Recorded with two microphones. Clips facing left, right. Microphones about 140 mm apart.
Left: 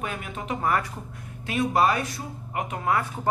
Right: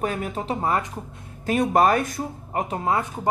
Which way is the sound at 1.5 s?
45° right (ahead or behind).